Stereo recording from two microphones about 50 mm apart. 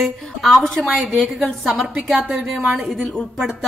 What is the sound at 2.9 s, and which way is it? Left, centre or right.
Speech, centre.